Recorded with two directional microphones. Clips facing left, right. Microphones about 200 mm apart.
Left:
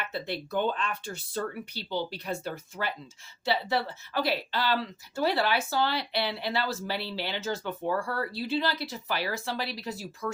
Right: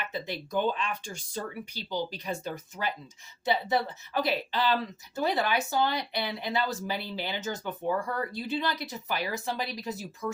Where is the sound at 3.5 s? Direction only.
20° right (ahead or behind).